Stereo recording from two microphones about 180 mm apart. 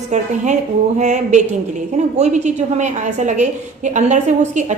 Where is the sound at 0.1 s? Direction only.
40° right (ahead or behind).